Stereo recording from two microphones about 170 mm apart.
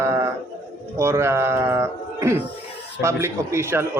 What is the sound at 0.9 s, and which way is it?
Speech, 15° right (ahead or behind).